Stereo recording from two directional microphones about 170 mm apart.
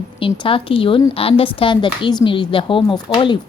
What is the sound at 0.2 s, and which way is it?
Speech, 30° left (ahead or behind).